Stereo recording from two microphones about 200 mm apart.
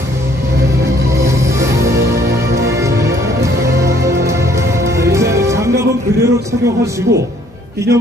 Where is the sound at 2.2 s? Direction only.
55° right (ahead or behind).